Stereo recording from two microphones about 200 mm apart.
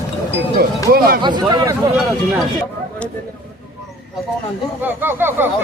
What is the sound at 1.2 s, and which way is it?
Speech, 20° right (ahead or behind).